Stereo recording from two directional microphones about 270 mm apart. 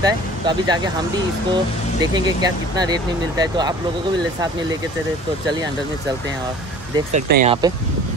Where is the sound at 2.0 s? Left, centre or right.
Centre.